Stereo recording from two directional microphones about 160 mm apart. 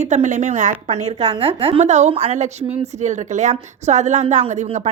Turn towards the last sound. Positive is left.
turn(degrees=-40)  # may be behind; listen again after turning